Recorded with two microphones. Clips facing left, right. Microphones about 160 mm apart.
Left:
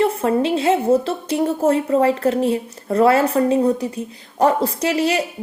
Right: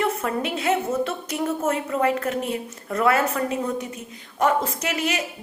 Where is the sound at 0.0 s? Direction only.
30° left (ahead or behind).